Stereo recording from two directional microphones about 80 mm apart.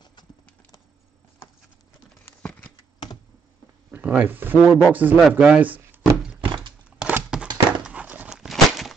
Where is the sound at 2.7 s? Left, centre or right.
Left.